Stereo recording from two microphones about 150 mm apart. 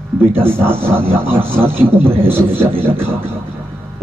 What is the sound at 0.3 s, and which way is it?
A man's voice, 15° right (ahead or behind).